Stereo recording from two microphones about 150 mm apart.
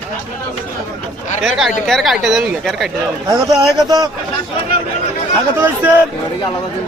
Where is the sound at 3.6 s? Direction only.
25° right (ahead or behind).